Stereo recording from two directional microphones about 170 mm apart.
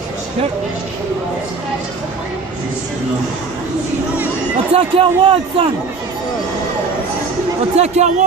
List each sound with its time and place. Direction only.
4.7 s a man's voice: 35° right (ahead or behind)
7.7 s a man's voice: 40° right (ahead or behind)